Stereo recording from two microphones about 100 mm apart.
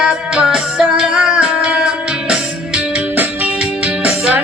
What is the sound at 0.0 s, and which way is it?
Music, 10° right (ahead or behind).